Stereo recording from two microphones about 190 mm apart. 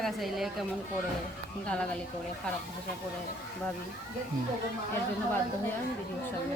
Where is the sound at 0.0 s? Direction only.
Centre (ahead or behind).